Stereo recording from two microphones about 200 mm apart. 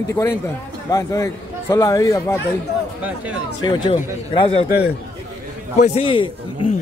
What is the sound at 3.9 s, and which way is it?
Speech, 25° left (ahead or behind).